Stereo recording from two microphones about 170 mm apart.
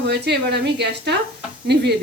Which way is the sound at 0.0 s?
85° right.